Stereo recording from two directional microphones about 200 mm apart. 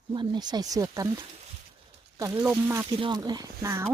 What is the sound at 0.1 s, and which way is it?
Speech, 25° right (ahead or behind).